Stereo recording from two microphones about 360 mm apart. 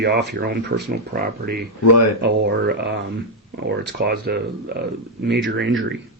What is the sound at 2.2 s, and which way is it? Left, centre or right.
Speech, right.